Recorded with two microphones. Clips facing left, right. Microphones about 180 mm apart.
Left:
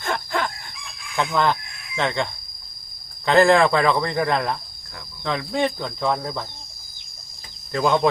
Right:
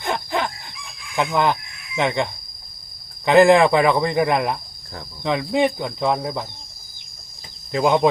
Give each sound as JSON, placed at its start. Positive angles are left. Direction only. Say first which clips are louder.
{"t": 0.0, "sound": "chicken", "louder": "right 2 dB", "side_deg": -20}
{"t": 2.0, "sound": "speech", "louder": "right 3 dB", "side_deg": -15}
{"t": 7.7, "sound": "speech", "louder": "right 2 dB", "side_deg": -15}